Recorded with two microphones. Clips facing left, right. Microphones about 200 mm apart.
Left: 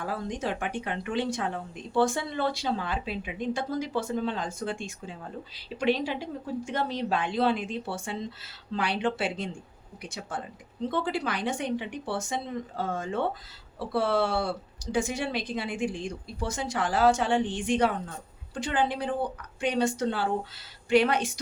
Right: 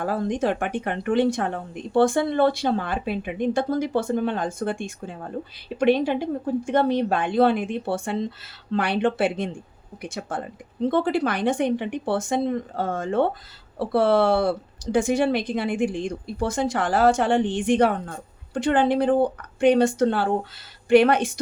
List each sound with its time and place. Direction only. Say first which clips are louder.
0.0 s a woman's voice: right 8 dB; 55° right (ahead or behind)